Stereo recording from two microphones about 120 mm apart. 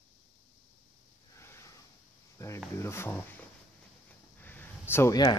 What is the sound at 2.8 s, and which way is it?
Speech, 20° left (ahead or behind).